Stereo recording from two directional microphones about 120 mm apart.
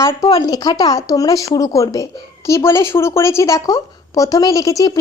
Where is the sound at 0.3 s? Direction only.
35° left (ahead or behind).